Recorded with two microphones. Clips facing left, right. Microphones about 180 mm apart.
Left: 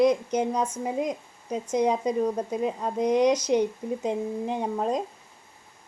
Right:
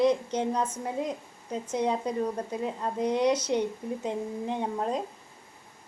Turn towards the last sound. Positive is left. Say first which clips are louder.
# left 3 dB
turn(degrees=15)  # may be behind; listen again after turning